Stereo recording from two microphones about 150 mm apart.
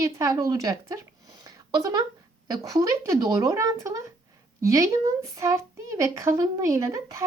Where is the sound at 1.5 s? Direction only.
25° right (ahead or behind).